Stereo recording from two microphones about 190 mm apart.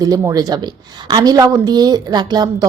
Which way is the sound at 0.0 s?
20° right (ahead or behind).